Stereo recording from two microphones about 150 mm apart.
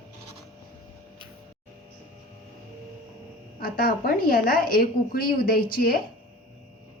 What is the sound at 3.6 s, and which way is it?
A woman's voice, 85° left.